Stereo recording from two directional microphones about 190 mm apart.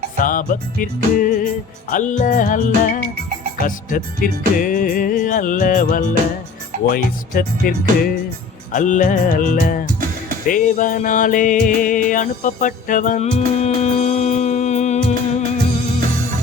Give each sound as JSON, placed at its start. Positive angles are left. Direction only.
{"t": 0.2, "sound": "music", "side_deg": 45}